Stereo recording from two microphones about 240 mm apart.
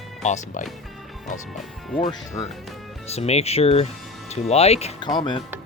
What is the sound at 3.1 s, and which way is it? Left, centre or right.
Speech, left.